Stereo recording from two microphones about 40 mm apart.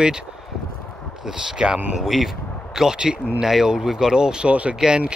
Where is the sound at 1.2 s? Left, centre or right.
Centre.